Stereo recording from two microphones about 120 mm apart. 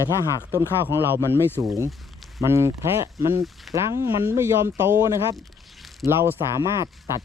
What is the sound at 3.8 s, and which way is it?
Speech, 25° right (ahead or behind).